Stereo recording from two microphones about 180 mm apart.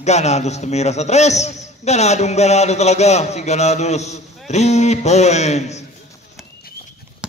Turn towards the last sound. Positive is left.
turn(degrees=40)  # may be behind; listen again after turning